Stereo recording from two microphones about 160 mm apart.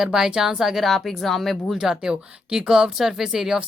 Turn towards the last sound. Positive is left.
turn(degrees=-5)  # may be behind; listen again after turning